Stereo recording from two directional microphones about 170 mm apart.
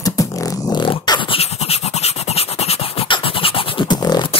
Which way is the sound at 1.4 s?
35° left (ahead or behind).